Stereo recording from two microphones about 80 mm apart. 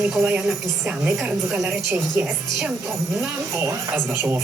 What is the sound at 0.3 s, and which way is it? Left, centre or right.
Speech, centre.